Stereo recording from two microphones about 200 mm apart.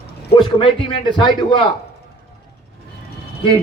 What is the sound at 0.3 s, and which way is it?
A man's voice, 25° left (ahead or behind).